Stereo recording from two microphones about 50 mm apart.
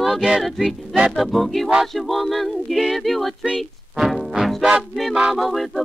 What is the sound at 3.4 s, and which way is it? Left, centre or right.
Speech, centre.